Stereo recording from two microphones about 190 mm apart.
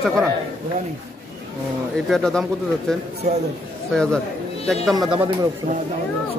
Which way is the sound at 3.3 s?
45° right (ahead or behind).